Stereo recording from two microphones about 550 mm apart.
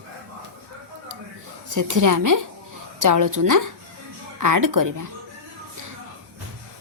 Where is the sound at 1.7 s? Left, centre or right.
Right.